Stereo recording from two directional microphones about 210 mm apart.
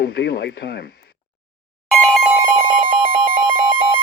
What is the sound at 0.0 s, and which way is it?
Speech, 50° left (ahead or behind).